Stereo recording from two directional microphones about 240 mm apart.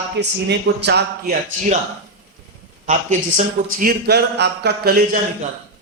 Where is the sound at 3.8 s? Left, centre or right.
Right.